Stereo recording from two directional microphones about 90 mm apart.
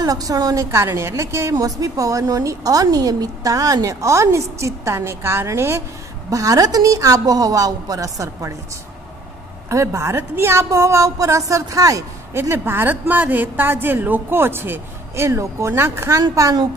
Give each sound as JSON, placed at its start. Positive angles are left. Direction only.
{"t": 0.0, "sound": "a woman's voice", "side_deg": -40}
{"t": 0.7, "sound": "a woman's voice", "side_deg": -30}
{"t": 9.7, "sound": "a woman's voice", "side_deg": -30}
{"t": 12.4, "sound": "speech", "side_deg": -25}